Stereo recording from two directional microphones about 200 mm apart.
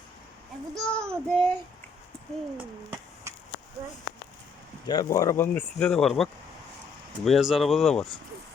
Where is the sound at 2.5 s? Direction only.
10° right (ahead or behind).